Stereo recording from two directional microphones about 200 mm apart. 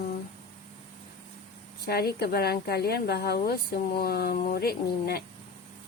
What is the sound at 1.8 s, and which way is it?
Speech, 50° left (ahead or behind).